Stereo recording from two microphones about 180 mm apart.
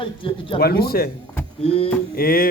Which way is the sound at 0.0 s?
30° left (ahead or behind).